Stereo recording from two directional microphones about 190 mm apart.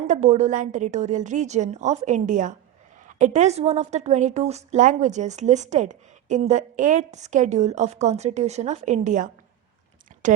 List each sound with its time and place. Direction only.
0.1 s a woman's voice: 40° right (ahead or behind)